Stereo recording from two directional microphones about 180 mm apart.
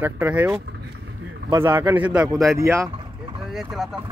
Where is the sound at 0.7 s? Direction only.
75° right (ahead or behind).